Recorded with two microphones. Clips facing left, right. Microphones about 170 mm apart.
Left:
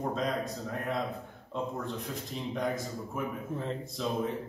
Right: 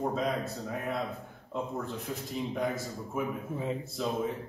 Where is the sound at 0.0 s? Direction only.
5° right (ahead or behind).